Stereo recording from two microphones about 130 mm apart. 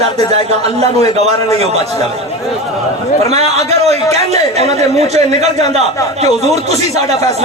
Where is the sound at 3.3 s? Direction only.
55° right (ahead or behind).